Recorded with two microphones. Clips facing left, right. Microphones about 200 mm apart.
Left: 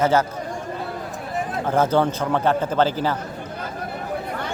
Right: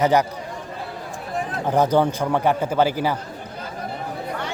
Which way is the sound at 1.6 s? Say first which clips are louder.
Right 1 dB; 15° right (ahead or behind).